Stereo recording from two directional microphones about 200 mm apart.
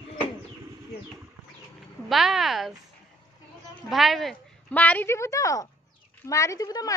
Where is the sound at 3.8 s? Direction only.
Centre (ahead or behind).